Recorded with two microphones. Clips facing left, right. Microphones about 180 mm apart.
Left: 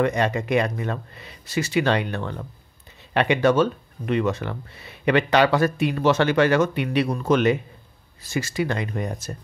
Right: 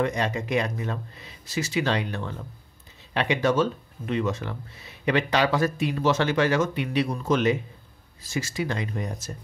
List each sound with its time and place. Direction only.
0.0 s speech: 60° left (ahead or behind)